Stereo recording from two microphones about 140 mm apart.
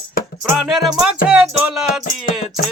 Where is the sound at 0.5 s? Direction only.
5° right (ahead or behind).